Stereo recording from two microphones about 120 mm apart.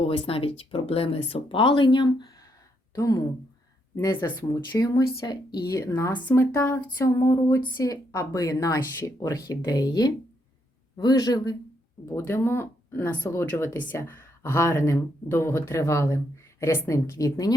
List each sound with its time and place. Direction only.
0.0 s speech: 55° left (ahead or behind)
2.9 s speech: 30° left (ahead or behind)
5.9 s speech: 15° left (ahead or behind)
12.0 s speech: 20° left (ahead or behind)